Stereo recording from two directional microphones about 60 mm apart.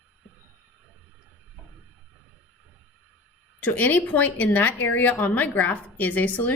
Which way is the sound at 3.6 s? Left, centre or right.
Left.